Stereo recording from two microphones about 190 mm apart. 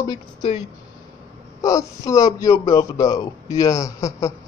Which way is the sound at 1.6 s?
15° left (ahead or behind).